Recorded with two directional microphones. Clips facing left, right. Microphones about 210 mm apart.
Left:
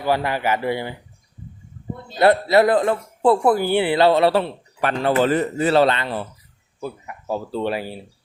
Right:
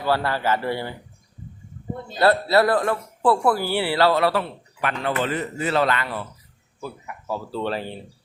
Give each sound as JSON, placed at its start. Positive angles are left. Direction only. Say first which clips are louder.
{"t": 0.0, "sound": "speech", "louder": "left 2 dB", "side_deg": 15}
{"t": 2.1, "sound": "speech", "louder": "left 3 dB", "side_deg": 20}
{"t": 7.6, "sound": "speech", "louder": "left 1 dB", "side_deg": 10}